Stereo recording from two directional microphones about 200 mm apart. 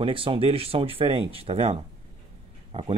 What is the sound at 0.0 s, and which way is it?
Speech, 25° right (ahead or behind).